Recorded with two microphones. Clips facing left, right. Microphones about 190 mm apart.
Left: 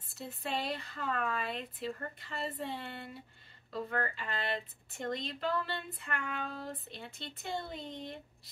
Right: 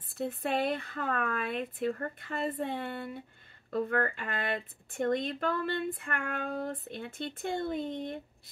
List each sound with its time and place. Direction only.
0.1 s speech: 55° right (ahead or behind)